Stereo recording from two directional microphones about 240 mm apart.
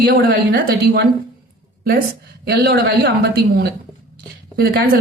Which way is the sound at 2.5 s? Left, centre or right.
Right.